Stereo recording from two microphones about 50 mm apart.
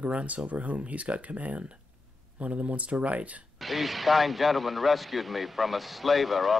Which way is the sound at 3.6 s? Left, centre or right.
Centre.